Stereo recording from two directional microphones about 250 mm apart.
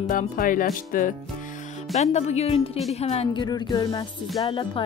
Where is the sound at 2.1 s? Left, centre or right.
Left.